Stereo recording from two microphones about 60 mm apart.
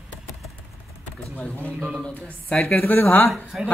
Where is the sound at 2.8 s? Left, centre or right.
Left.